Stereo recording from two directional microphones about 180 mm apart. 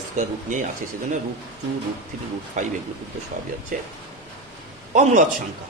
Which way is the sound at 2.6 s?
40° right (ahead or behind).